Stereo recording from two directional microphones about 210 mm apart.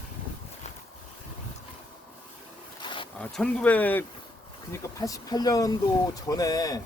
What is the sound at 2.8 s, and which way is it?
Zipper, 25° left (ahead or behind).